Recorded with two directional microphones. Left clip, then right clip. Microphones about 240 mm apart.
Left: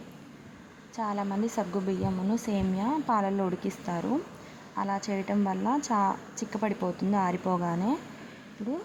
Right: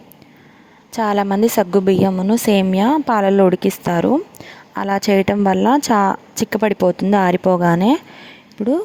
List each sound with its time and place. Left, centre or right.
0.9 s a woman's voice: right